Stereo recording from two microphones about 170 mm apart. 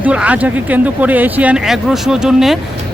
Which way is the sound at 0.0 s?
5° right (ahead or behind).